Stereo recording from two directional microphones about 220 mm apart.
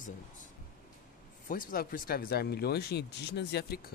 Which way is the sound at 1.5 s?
40° left (ahead or behind).